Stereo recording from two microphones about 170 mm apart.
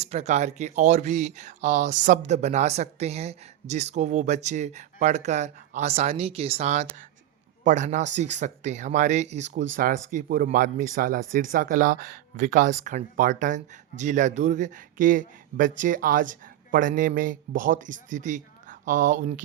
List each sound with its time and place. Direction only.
0.0 s speech: 40° right (ahead or behind)